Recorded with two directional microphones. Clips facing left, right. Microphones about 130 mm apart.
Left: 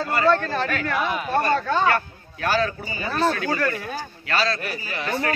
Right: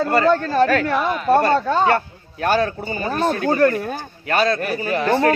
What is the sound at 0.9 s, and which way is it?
Speech, 5° left (ahead or behind).